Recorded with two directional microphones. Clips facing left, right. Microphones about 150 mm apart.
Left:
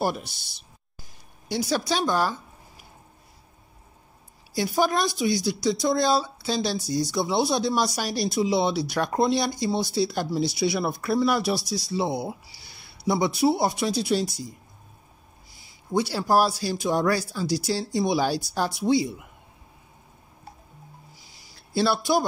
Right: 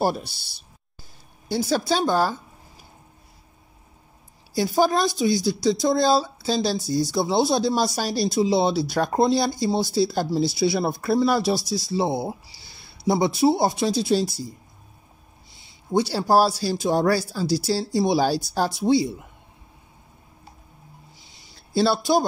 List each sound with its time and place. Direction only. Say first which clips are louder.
0.0 s speech: right 3 dB; 35° right (ahead or behind)
1.5 s speech: right 3 dB; 30° right (ahead or behind)
4.7 s speech: right 3 dB; 30° right (ahead or behind)
15.9 s speech: right 3 dB; 30° right (ahead or behind)
21.2 s a sound: right 1 dB; 25° right (ahead or behind)